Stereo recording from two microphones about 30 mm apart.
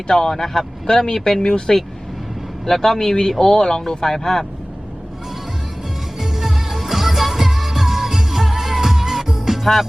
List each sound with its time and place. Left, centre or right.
0.1 s speech: left
2.6 s speech: centre
6.1 s music: centre